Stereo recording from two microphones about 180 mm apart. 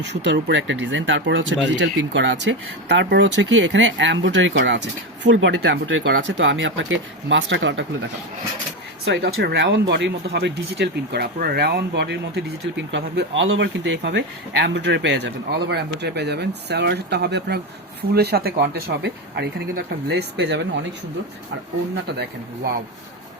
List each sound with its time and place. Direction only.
0.1 s speech: 75° right (ahead or behind); by 7.9 s 90° right
9.0 s speech: 65° right (ahead or behind)
22.0 s speech: 70° right (ahead or behind)